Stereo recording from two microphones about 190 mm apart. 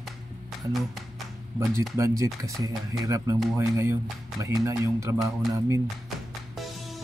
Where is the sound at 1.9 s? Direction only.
15° right (ahead or behind).